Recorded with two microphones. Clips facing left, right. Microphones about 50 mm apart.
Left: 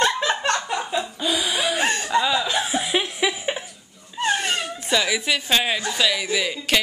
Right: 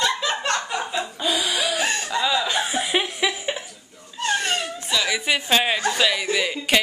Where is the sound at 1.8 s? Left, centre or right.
Left.